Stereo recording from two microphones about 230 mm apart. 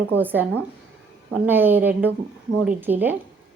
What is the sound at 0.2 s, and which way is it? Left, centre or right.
A woman's voice, centre.